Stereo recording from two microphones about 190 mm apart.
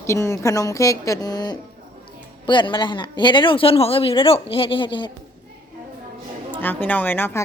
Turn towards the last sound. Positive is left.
turn(degrees=10)  # may be behind; listen again after turning